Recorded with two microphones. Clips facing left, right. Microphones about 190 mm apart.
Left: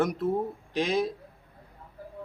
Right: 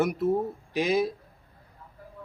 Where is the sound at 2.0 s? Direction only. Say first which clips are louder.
Left 5 dB; 30° left (ahead or behind).